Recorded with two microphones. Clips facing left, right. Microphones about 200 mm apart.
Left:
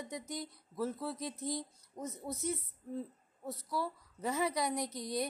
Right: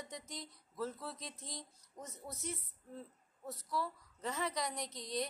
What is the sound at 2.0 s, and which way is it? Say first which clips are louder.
Speech: left 8 dB; 25° left (ahead or behind).